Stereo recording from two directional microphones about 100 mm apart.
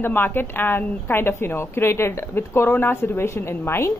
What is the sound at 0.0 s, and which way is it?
Speech, 20° left (ahead or behind).